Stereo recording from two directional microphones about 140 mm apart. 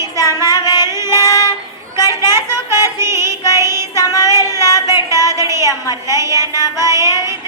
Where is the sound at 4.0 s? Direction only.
25° left (ahead or behind).